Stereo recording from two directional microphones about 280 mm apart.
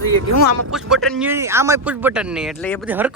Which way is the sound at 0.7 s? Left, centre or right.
Centre.